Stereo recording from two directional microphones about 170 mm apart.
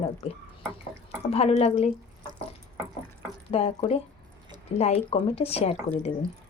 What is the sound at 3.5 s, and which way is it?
Speech, 35° left (ahead or behind).